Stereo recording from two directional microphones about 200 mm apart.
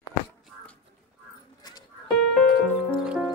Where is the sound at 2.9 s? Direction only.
Centre (ahead or behind).